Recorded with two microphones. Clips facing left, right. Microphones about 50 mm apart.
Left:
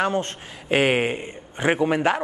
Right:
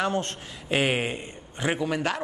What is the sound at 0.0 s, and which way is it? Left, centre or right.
A man's voice, left.